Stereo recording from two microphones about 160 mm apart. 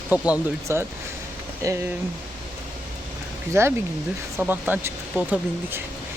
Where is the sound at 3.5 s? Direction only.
15° right (ahead or behind).